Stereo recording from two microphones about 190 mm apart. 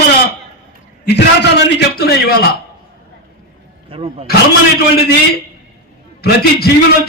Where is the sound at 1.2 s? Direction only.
65° left (ahead or behind).